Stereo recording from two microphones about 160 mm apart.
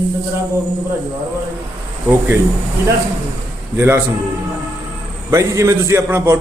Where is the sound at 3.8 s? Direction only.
10° right (ahead or behind).